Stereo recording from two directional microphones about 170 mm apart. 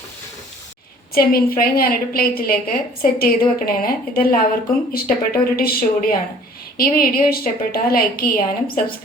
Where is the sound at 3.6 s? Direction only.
60° left (ahead or behind).